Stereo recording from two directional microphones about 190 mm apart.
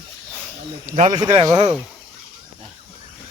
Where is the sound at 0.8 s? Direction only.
40° right (ahead or behind).